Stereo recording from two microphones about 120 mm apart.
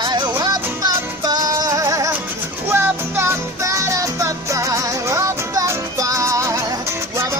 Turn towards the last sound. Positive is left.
turn(degrees=-25)  # may be behind; listen again after turning